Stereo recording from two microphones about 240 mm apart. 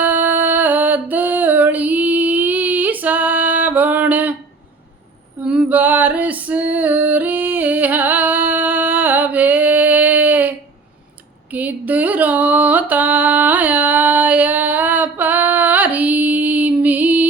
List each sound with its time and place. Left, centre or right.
0.0 s music: centre
5.5 s female singing: centre
11.5 s music: centre